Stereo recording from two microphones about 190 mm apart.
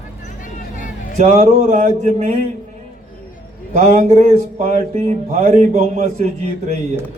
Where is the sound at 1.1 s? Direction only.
40° right (ahead or behind).